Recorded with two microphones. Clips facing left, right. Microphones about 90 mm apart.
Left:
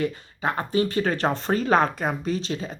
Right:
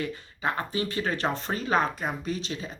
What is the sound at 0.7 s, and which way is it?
Speech, 45° left (ahead or behind).